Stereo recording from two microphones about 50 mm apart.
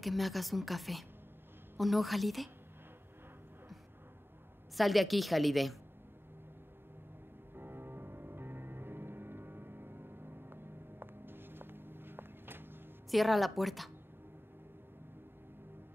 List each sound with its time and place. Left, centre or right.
0.0 s speech: centre
4.7 s speech: centre
7.5 s music: right
13.1 s speech: centre